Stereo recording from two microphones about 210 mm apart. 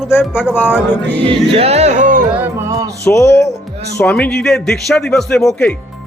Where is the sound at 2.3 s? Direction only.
10° right (ahead or behind).